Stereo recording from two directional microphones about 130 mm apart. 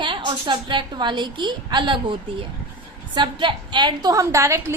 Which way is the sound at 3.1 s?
35° right (ahead or behind).